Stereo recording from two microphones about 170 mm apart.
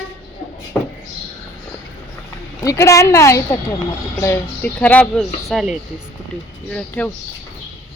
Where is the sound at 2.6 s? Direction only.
20° left (ahead or behind).